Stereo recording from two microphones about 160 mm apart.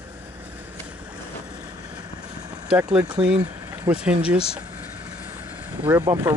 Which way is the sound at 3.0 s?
30° right (ahead or behind).